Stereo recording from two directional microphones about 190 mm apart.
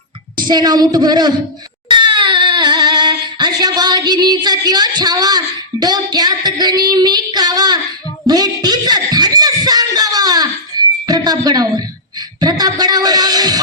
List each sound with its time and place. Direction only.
0.3 s child singing: 20° right (ahead or behind)
1.9 s a sound: 25° right (ahead or behind)
5.8 s child singing: 20° right (ahead or behind)
8.3 s music: 20° right (ahead or behind)